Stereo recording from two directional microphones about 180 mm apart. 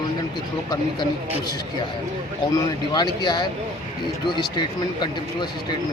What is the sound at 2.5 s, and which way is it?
Speech, 25° left (ahead or behind).